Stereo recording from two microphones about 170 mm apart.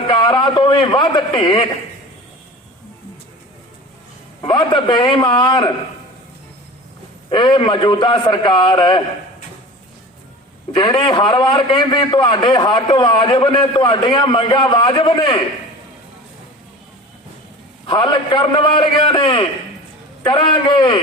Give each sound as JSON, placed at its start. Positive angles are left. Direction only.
{"t": 0.1, "sound": "a man's voice", "side_deg": 25}
{"t": 4.4, "sound": "a man's voice", "side_deg": 25}
{"t": 7.3, "sound": "a man's voice", "side_deg": 25}
{"t": 10.8, "sound": "a man's voice", "side_deg": 25}
{"t": 17.8, "sound": "a man's voice", "side_deg": 25}